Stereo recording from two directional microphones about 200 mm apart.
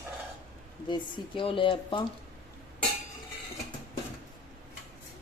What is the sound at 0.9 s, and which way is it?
Speech, 25° left (ahead or behind).